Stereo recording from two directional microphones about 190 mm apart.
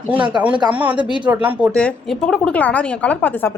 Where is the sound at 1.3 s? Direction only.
10° right (ahead or behind).